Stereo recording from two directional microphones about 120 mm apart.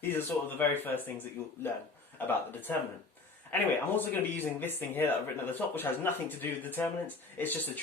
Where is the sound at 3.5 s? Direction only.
15° left (ahead or behind).